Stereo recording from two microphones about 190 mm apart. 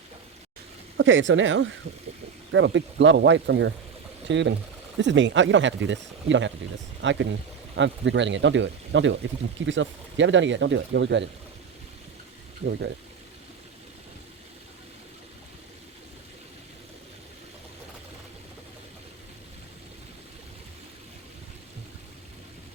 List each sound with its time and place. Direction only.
0.9 s speech: 80° right